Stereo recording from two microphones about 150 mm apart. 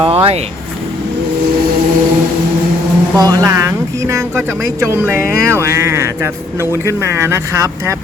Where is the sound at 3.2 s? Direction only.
25° right (ahead or behind).